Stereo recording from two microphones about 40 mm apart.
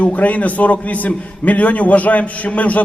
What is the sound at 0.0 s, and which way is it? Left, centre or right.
A man's voice, left.